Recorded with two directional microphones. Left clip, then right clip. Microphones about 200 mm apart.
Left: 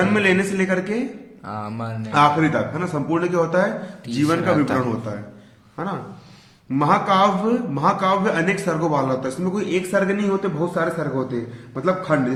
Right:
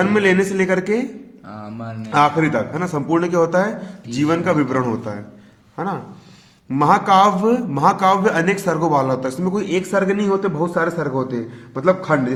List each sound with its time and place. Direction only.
0.0 s a man's voice: 40° right (ahead or behind)
1.5 s speech: 30° left (ahead or behind)
2.0 s a man's voice: 40° right (ahead or behind)